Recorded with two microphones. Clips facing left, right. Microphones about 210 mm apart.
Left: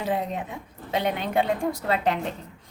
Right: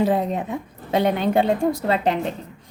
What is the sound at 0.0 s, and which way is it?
A woman's voice, 40° right (ahead or behind).